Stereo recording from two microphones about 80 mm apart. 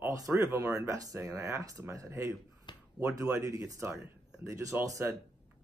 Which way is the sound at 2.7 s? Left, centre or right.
Left.